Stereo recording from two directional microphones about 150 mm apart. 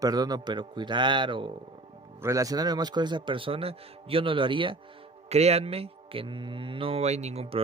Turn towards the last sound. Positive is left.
turn(degrees=-45)  # may be behind; listen again after turning